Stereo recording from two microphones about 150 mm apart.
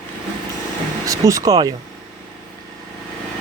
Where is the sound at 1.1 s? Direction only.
20° right (ahead or behind).